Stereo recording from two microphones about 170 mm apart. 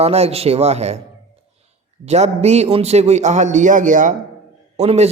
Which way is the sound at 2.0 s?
40° right (ahead or behind).